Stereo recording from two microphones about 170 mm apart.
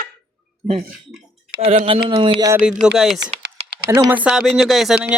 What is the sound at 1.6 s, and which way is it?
Speech, 30° right (ahead or behind).